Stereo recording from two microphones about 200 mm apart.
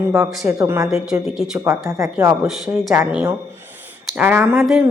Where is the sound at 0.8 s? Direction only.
5° right (ahead or behind).